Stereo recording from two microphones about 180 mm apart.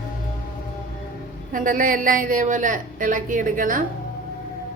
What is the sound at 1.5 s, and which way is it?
A woman's voice, 50° right (ahead or behind).